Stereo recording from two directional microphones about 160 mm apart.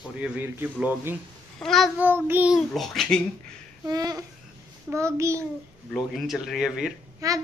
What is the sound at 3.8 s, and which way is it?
Babbling, 20° right (ahead or behind).